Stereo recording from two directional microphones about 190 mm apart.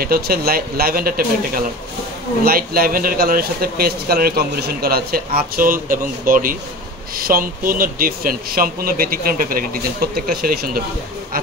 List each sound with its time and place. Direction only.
0.0 s speech: 55° right (ahead or behind)